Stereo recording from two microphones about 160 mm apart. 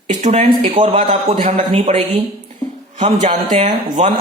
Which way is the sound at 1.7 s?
35° right (ahead or behind).